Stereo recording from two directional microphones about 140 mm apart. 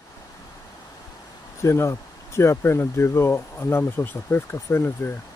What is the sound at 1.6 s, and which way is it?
Speech, 20° left (ahead or behind).